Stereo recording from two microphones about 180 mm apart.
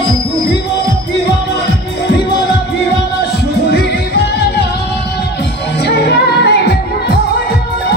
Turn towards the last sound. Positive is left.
turn(degrees=65)  # may be behind; listen again after turning